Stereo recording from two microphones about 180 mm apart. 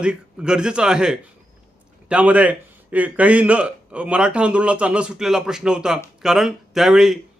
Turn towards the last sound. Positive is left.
turn(degrees=-5)  # may be behind; listen again after turning